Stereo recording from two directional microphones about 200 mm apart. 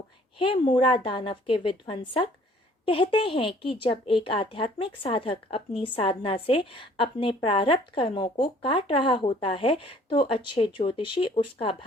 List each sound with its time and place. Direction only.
0.3 s speech: 25° left (ahead or behind)